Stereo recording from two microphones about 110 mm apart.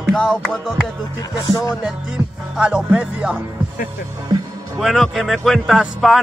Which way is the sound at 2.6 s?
10° right (ahead or behind).